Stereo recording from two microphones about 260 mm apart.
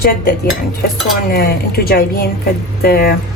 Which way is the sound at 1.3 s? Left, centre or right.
Left.